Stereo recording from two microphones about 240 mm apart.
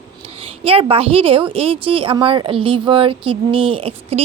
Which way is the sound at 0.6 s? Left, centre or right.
Right.